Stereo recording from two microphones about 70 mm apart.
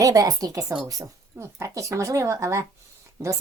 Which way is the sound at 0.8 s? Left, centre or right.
Right.